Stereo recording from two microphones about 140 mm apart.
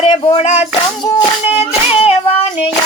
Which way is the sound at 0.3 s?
55° left (ahead or behind).